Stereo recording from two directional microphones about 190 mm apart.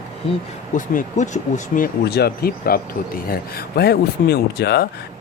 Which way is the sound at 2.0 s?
55° left (ahead or behind).